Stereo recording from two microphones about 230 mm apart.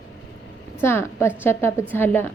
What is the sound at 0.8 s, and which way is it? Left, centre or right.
A woman's voice, centre.